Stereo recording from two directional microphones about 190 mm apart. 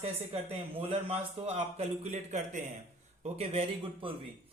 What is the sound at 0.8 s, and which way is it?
A man's voice, 30° right (ahead or behind).